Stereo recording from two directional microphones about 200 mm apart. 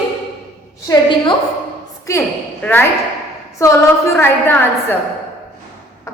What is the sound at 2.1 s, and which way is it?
A woman's voice, 10° left (ahead or behind).